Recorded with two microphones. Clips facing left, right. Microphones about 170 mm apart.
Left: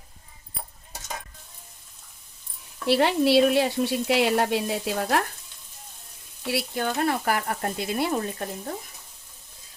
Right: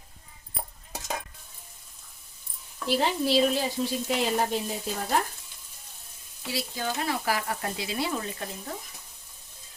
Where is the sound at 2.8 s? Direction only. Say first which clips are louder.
Left 5 dB; 70° left (ahead or behind).